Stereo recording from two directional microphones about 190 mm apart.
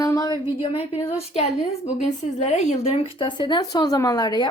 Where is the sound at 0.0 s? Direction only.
20° left (ahead or behind).